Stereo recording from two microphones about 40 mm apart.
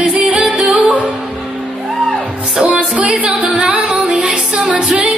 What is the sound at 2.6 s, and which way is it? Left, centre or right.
Music, right.